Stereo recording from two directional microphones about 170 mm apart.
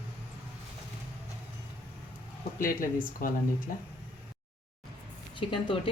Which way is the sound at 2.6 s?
55° left (ahead or behind).